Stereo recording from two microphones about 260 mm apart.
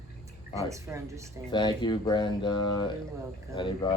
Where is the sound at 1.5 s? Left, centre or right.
Centre.